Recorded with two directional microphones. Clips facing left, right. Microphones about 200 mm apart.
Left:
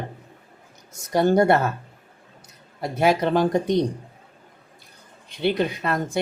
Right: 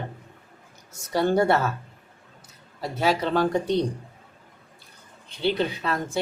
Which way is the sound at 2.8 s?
20° left (ahead or behind).